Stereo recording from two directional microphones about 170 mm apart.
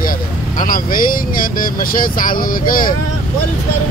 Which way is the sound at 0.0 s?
55° left (ahead or behind).